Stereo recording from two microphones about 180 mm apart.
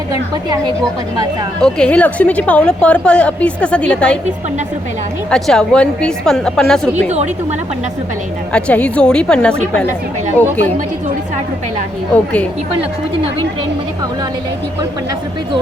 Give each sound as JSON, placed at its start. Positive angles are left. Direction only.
{"t": 1.6, "sound": "a woman's voice", "side_deg": 5}
{"t": 5.3, "sound": "a woman's voice", "side_deg": 5}
{"t": 8.5, "sound": "a woman's voice", "side_deg": 5}
{"t": 12.1, "sound": "a woman's voice", "side_deg": 10}